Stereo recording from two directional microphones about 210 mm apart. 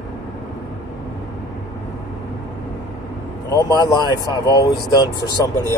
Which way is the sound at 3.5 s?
20° left (ahead or behind).